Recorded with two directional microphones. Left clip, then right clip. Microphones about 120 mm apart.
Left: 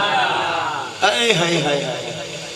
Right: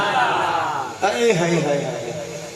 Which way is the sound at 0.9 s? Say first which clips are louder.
Left 2 dB; 20° left (ahead or behind).